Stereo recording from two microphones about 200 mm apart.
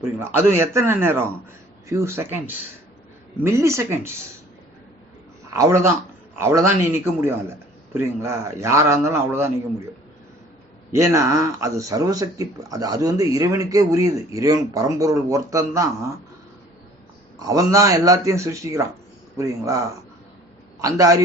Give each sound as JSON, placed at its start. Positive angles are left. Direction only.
{"t": 0.0, "sound": "speech", "side_deg": -10}
{"t": 3.4, "sound": "speech", "side_deg": -15}
{"t": 5.5, "sound": "a man's voice", "side_deg": -15}
{"t": 10.9, "sound": "speech", "side_deg": -15}
{"t": 17.4, "sound": "a man's voice", "side_deg": -15}